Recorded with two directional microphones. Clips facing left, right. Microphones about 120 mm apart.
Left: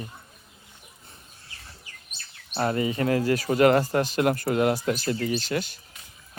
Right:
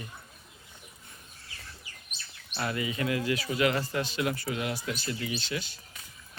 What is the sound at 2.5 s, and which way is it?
Speech, 40° left (ahead or behind).